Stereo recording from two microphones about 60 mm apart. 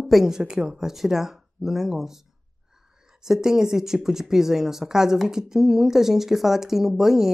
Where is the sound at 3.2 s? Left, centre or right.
Centre.